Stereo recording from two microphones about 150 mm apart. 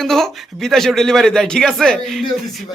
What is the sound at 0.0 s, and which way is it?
Speech, 5° left (ahead or behind).